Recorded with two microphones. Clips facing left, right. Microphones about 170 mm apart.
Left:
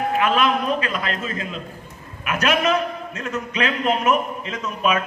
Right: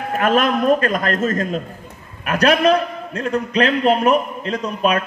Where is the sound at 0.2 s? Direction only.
45° right (ahead or behind).